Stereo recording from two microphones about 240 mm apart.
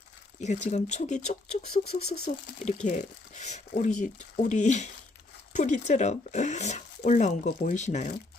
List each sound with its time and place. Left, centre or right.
0.3 s speech: left